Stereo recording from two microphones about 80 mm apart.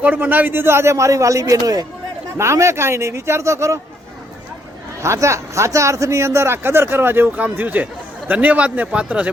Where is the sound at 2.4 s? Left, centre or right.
Right.